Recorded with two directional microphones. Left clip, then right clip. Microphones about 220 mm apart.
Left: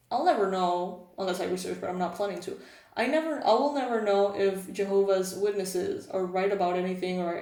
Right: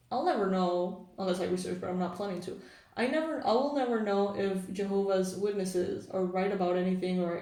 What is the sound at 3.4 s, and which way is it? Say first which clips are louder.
Speech: left 4 dB; 25° left (ahead or behind).